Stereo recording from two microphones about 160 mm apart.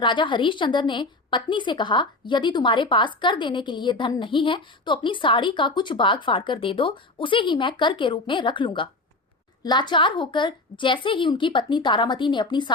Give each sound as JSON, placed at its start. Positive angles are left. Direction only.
{"t": 0.0, "sound": "a woman's voice", "side_deg": 30}